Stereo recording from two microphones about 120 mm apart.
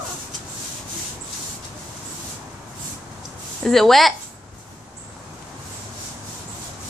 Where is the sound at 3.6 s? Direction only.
Centre (ahead or behind).